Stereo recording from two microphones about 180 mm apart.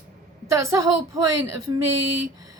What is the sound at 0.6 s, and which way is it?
Speech, 20° right (ahead or behind).